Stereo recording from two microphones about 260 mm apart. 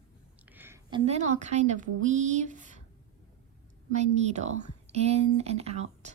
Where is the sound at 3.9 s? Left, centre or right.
Right.